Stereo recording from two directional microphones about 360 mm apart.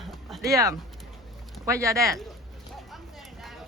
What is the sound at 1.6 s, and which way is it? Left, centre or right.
Speech, centre.